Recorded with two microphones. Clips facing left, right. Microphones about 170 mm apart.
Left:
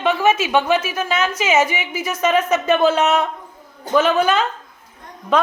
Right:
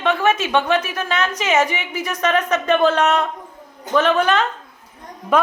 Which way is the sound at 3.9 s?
35° left (ahead or behind).